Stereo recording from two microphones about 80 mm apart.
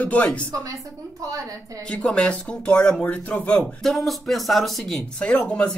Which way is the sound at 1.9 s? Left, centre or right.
Centre.